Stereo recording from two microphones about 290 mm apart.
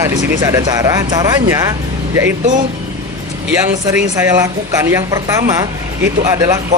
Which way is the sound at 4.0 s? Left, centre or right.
Centre.